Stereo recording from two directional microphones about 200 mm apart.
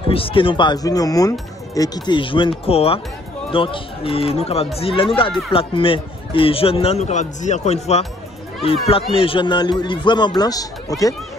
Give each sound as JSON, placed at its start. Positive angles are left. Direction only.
{"t": 0.1, "sound": "speech", "side_deg": 25}